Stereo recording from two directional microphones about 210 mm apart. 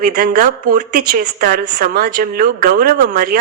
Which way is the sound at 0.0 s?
40° right (ahead or behind).